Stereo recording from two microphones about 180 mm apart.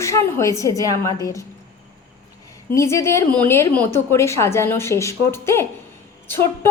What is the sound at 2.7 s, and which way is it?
A woman's voice, 15° left (ahead or behind).